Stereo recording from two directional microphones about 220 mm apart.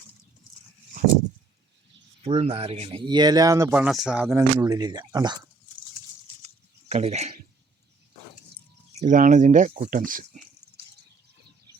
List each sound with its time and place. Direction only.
2.2 s speech: 25° right (ahead or behind)
6.8 s speech: 30° right (ahead or behind)
9.0 s speech: 35° right (ahead or behind)